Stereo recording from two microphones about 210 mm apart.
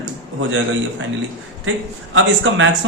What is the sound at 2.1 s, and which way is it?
Speech, 65° right (ahead or behind).